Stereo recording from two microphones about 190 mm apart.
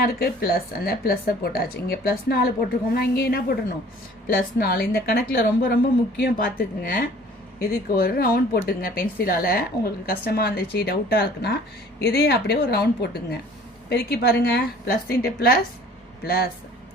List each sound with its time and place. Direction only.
0.0 s a woman's voice: 55° left (ahead or behind)